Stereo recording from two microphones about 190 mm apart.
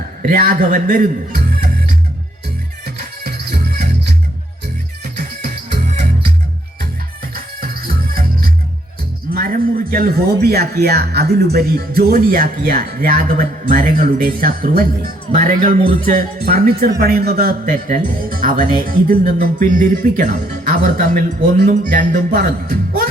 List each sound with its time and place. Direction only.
0.2 s a man's voice: 50° right (ahead or behind)
3.0 s music: 55° right (ahead or behind)
7.6 s music: 50° right (ahead or behind)
9.3 s a man's voice: 50° right (ahead or behind)